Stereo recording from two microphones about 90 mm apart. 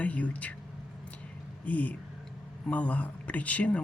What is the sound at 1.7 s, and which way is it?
Speech, 15° left (ahead or behind).